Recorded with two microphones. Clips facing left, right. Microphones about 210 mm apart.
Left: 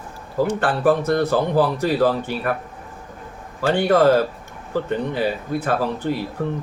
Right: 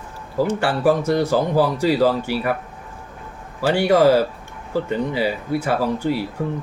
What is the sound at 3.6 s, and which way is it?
Speech, 10° right (ahead or behind).